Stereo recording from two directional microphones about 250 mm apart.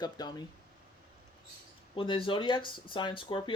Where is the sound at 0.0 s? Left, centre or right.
Centre.